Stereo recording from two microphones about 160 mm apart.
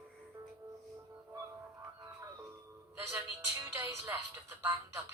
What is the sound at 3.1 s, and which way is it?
Music, 15° right (ahead or behind).